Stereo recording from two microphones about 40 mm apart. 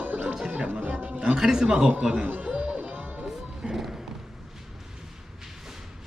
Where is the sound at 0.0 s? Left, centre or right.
Right.